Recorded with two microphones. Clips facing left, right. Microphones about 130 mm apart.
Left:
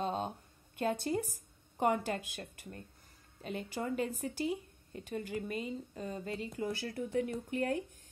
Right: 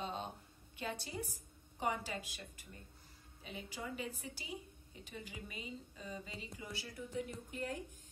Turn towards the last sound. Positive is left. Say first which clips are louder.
# left 9 dB
turn(degrees=65)  # may be behind; listen again after turning